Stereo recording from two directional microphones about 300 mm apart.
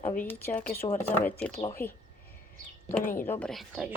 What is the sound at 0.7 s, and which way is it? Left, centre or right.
Speech, left.